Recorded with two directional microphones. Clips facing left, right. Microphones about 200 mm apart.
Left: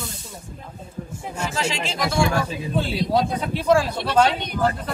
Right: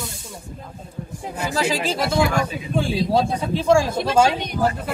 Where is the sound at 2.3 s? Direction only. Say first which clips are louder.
Right 1 dB; 15° right (ahead or behind).